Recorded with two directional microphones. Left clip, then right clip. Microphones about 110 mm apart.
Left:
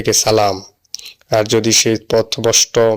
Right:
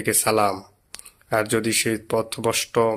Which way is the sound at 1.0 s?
30° left (ahead or behind).